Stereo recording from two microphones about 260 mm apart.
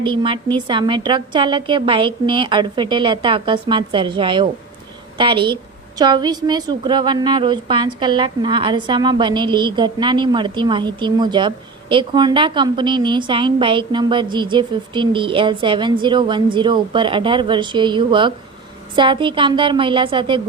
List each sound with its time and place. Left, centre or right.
0.0 s a woman's voice: centre